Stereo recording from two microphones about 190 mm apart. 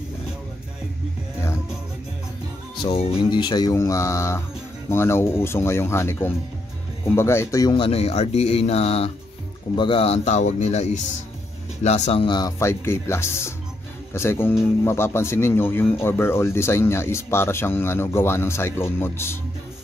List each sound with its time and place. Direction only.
2.8 s speech: 30° left (ahead or behind); by 19.3 s 10° left (ahead or behind)